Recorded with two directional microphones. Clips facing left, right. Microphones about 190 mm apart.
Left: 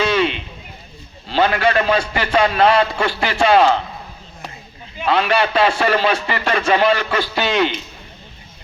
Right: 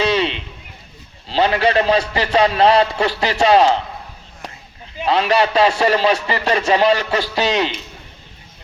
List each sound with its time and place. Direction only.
0.0 s a sound: 35° right (ahead or behind)
1.3 s a man's voice: 35° right (ahead or behind)
4.9 s a man's voice: 35° right (ahead or behind)